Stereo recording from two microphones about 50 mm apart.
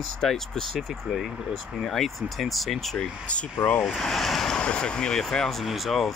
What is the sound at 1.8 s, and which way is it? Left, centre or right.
Speech, centre.